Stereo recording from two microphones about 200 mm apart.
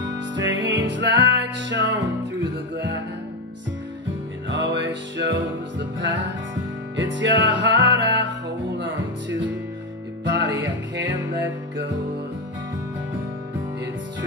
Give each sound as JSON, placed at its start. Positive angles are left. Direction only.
{"t": 0.0, "sound": "music", "side_deg": -70}
{"t": 4.5, "sound": "music", "side_deg": -65}